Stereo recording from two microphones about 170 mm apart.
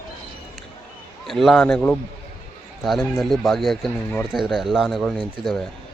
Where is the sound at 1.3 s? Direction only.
Centre (ahead or behind).